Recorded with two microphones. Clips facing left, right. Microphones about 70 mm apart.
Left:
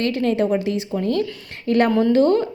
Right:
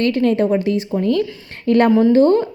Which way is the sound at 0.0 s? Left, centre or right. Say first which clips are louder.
Right 4 dB; right.